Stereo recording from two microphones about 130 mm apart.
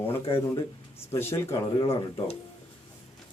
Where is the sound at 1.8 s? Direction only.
35° left (ahead or behind).